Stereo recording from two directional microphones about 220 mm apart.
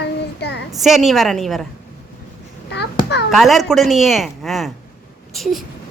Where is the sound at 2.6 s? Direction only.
50° left (ahead or behind).